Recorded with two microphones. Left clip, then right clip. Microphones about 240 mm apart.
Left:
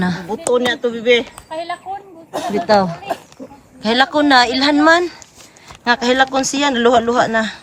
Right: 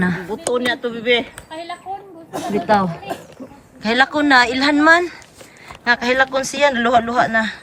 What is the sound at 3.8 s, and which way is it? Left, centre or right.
Speech, centre.